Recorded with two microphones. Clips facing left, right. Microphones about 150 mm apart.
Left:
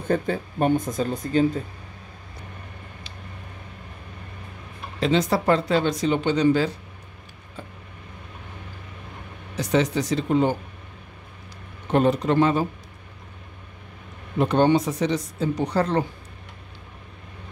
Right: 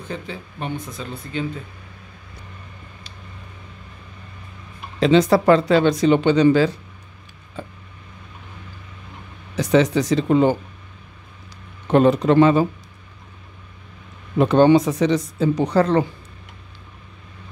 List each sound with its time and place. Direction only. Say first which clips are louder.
0.1 s speech: left 9 dB; 50° left (ahead or behind)
5.0 s speech: right 6 dB; 90° right
9.6 s speech: right 5 dB; 90° right
11.9 s speech: right 5 dB; 90° right
14.4 s speech: right 5 dB; 90° right